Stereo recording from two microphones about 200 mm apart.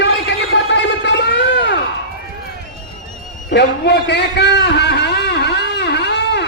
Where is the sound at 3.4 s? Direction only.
60° left (ahead or behind).